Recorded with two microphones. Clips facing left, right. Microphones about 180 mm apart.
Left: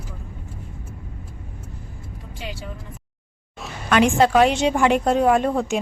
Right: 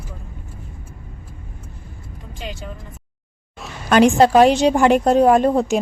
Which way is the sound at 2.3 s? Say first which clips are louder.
Right 2 dB; 5° left (ahead or behind).